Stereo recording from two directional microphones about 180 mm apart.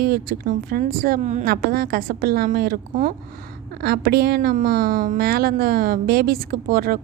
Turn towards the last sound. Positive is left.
turn(degrees=-55)  # may be behind; listen again after turning